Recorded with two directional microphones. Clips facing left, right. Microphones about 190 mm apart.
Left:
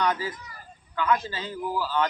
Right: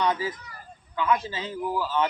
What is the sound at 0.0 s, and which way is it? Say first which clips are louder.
A man's voice: right 1 dB; 20° right (ahead or behind).